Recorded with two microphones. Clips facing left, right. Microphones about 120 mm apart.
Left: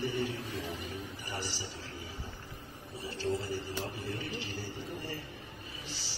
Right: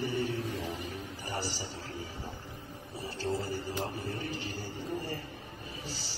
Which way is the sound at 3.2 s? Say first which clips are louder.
Even; 40° right (ahead or behind).